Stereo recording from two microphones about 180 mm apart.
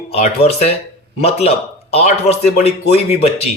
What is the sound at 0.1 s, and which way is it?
Speech, 35° left (ahead or behind).